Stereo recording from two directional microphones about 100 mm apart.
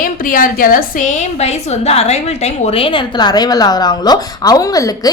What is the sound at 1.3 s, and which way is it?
A woman's voice, 90° left.